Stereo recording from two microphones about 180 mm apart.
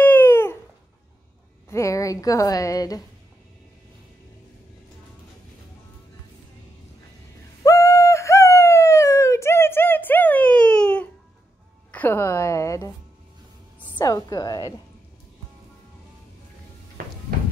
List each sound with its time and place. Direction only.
0.0 s a sound: 10° left (ahead or behind)
1.7 s a woman's voice: 15° left (ahead or behind)
7.6 s bird: 15° left (ahead or behind)
11.9 s speech: 10° left (ahead or behind)
13.9 s a woman's voice: 20° left (ahead or behind)